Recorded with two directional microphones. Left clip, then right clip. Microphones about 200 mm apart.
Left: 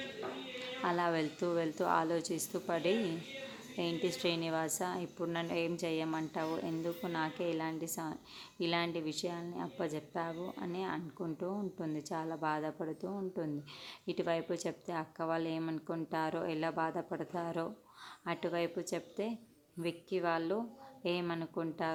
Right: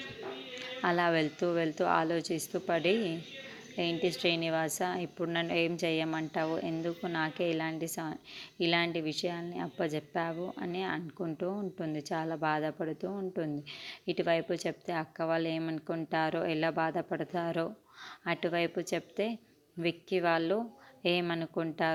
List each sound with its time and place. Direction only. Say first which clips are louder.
0.8 s a woman's voice: right 5 dB; 20° right (ahead or behind)